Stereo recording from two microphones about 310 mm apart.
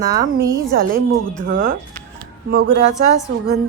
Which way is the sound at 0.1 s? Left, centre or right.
Centre.